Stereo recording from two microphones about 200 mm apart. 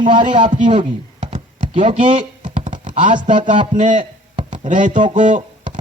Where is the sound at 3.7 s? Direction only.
40° right (ahead or behind).